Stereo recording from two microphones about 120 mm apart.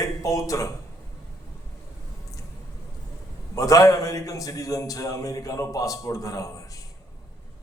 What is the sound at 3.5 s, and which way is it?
A man's voice, 30° left (ahead or behind).